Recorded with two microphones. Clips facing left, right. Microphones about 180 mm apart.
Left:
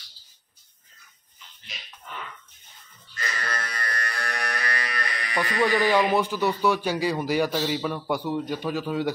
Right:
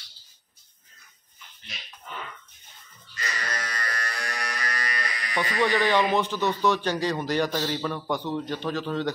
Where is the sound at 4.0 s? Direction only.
60° left (ahead or behind).